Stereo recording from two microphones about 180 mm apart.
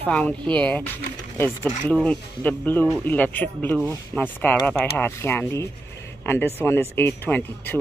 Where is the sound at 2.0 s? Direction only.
10° left (ahead or behind).